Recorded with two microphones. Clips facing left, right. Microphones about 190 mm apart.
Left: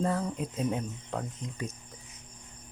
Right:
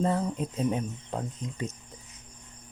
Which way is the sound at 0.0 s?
25° right (ahead or behind).